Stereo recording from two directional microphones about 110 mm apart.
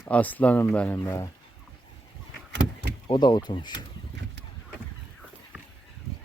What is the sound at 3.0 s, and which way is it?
Speech, 45° left (ahead or behind).